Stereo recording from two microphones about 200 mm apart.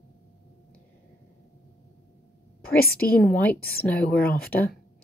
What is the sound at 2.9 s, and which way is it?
Speech, 5° left (ahead or behind).